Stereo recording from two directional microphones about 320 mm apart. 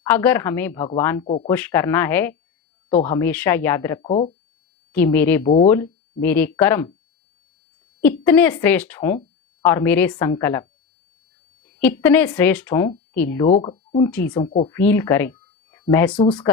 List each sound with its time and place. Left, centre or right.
0.0 s speech: centre
1.5 s speech: centre
4.1 s speech: centre
4.9 s a woman's voice: centre
8.0 s a woman's voice: centre
11.8 s speech: centre
14.1 s speech: centre
14.7 s speech: centre